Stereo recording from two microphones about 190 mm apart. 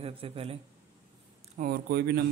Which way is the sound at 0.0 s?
30° right (ahead or behind).